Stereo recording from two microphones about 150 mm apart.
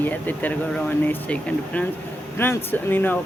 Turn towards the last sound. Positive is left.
turn(degrees=15)  # may be behind; listen again after turning